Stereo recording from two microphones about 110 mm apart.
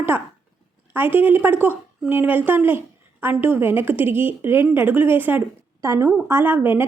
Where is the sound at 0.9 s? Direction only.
20° right (ahead or behind).